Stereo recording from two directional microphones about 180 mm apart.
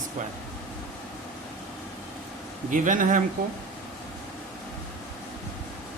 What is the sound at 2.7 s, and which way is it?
Speech, 45° right (ahead or behind).